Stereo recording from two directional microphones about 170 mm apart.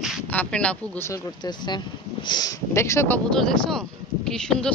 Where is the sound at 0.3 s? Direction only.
5° left (ahead or behind).